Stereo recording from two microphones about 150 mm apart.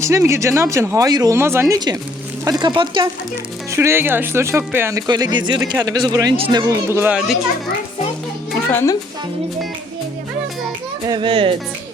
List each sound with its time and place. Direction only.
0.0 s speech: 20° right (ahead or behind)
3.7 s speech: 15° right (ahead or behind)
8.5 s a child's voice: 15° left (ahead or behind)
11.0 s a child's voice: 30° right (ahead or behind)